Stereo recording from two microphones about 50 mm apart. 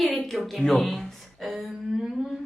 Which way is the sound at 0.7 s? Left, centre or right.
Centre.